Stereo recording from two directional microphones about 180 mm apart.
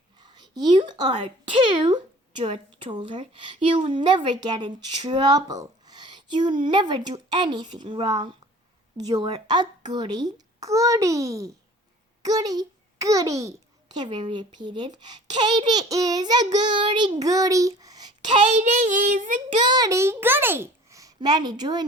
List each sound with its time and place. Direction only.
0.2 s a woman's voice: 25° right (ahead or behind)
18.3 s child singing: 40° right (ahead or behind)
19.6 s a child's voice: 20° right (ahead or behind)